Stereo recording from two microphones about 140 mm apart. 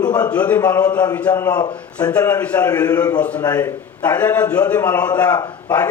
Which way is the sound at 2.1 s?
15° left (ahead or behind).